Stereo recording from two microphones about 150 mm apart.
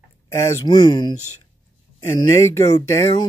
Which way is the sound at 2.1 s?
20° left (ahead or behind).